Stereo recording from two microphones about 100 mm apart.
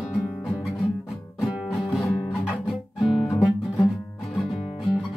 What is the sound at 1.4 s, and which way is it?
Music, centre (ahead or behind).